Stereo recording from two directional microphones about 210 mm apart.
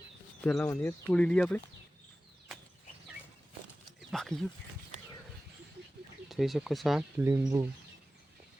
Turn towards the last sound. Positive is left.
turn(degrees=-10)  # may be behind; listen again after turning